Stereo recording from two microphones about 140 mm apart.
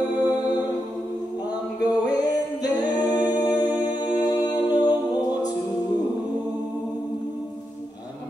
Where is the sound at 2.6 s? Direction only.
30° left (ahead or behind).